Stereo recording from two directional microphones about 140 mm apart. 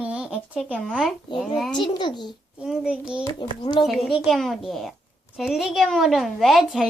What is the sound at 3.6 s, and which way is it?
Speech, 30° left (ahead or behind).